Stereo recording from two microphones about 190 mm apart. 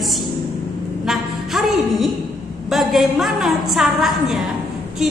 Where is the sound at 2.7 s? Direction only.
Centre (ahead or behind).